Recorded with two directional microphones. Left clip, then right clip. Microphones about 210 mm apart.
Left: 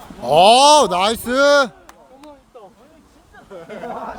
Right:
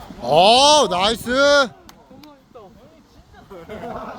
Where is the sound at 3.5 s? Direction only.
50° right (ahead or behind).